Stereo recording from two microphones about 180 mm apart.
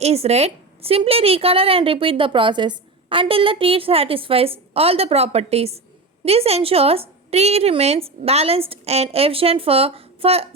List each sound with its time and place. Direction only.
0.0 s a woman's voice: 35° right (ahead or behind)